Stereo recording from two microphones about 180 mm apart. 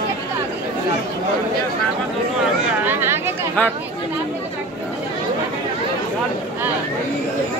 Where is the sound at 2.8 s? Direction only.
10° right (ahead or behind).